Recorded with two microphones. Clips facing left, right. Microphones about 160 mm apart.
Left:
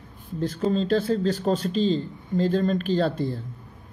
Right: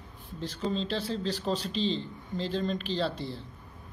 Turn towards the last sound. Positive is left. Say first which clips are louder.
# left 8 dB
turn(degrees=50)  # may be behind; listen again after turning